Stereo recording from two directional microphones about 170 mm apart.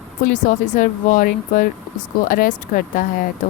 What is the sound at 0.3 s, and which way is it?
Speech, 50° left (ahead or behind).